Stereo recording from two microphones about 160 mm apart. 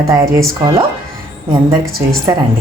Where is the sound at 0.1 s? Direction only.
25° right (ahead or behind).